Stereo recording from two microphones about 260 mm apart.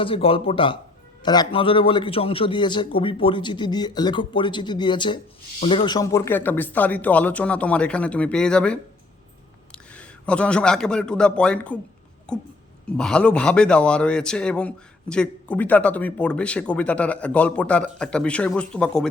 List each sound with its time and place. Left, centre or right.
0.0 s a man's voice: left; by 19.0 s centre